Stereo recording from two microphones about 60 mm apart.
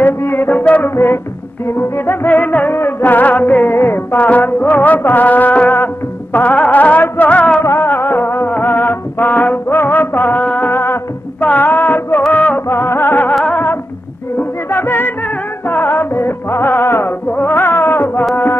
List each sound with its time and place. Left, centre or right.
0.2 s music: left
4.2 s music: left
7.6 s music: left
10.4 s music: left
10.7 s music: left
11.4 s a sound: left
12.3 s music: left
12.6 s music: left